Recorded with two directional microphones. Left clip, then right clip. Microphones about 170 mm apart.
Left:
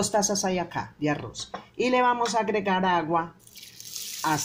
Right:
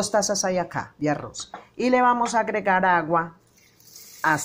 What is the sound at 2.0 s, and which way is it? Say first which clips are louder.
Speech: right 3 dB; 5° right (ahead or behind).